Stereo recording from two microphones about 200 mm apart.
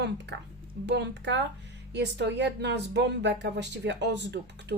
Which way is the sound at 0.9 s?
60° right (ahead or behind).